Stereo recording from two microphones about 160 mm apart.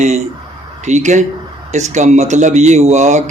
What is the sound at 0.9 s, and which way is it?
Speech, 45° right (ahead or behind).